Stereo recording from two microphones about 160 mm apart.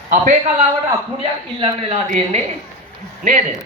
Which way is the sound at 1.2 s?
35° right (ahead or behind).